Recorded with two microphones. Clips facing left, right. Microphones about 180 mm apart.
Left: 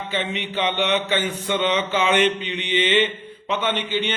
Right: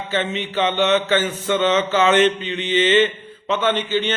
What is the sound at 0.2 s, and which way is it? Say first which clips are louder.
Speech: right 4 dB; 15° left (ahead or behind).